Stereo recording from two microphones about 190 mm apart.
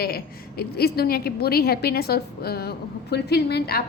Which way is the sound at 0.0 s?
55° left (ahead or behind).